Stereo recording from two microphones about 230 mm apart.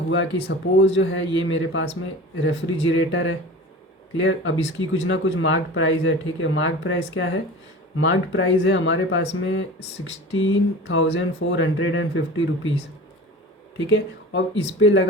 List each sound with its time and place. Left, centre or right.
0.1 s speech: left
13.9 s speech: left